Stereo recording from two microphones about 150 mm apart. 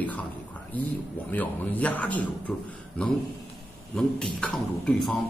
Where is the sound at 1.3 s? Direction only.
10° left (ahead or behind).